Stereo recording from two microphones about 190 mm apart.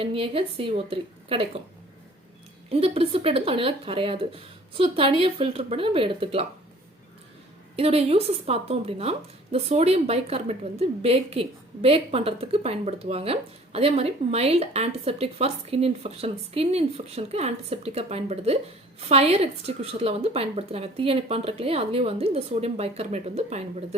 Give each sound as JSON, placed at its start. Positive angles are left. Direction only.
{"t": 0.0, "sound": "speech", "side_deg": -30}
{"t": 2.6, "sound": "speech", "side_deg": -30}
{"t": 7.8, "sound": "a woman's voice", "side_deg": -30}